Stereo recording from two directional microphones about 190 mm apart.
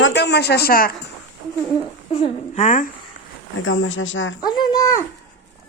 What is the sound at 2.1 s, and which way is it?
Speech, 35° left (ahead or behind).